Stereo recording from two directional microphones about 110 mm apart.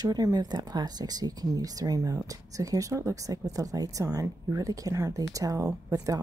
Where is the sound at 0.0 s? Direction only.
35° right (ahead or behind).